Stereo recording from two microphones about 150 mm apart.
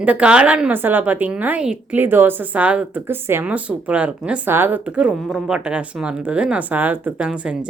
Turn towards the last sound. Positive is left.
turn(degrees=-5)  # may be behind; listen again after turning